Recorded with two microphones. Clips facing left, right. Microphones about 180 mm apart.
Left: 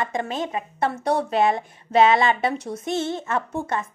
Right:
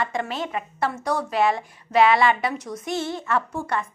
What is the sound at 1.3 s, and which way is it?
Speech, 20° left (ahead or behind).